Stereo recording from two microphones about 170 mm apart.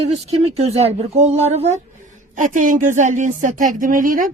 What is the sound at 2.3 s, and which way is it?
Speech, 50° right (ahead or behind).